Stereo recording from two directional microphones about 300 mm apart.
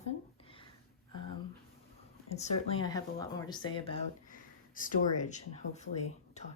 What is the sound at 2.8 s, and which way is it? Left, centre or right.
Speech, centre.